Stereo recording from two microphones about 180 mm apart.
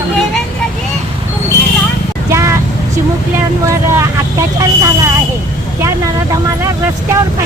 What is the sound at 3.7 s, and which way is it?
Vehicle, 15° right (ahead or behind).